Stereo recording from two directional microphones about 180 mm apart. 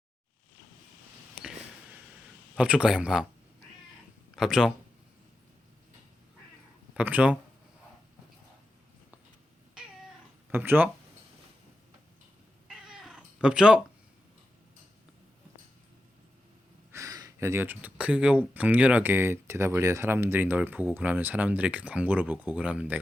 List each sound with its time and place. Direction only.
2.6 s speech: 5° right (ahead or behind)
4.4 s speech: centre (ahead or behind)
6.9 s speech: 10° right (ahead or behind)
10.5 s speech: 10° right (ahead or behind)
12.6 s cat: 5° right (ahead or behind)
16.9 s speech: 20° right (ahead or behind)